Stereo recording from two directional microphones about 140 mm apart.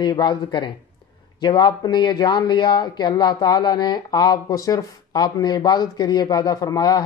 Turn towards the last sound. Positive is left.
turn(degrees=25)  # may be behind; listen again after turning